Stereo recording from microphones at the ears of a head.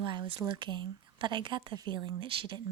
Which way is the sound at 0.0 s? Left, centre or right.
Right.